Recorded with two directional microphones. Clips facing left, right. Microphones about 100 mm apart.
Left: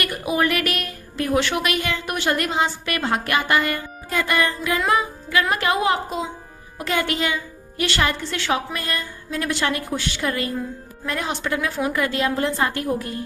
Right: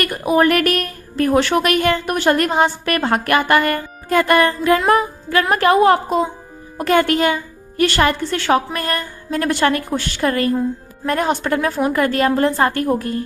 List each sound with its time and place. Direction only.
0.0 s a woman's voice: 45° right (ahead or behind)